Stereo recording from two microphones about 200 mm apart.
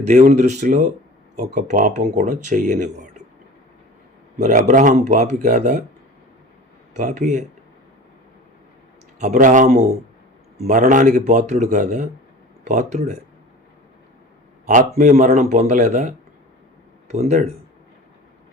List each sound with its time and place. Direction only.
0.1 s speech: 35° right (ahead or behind)
4.4 s speech: 40° right (ahead or behind)
6.9 s speech: 35° right (ahead or behind)
9.2 s speech: 40° right (ahead or behind)
14.9 s speech: 40° right (ahead or behind)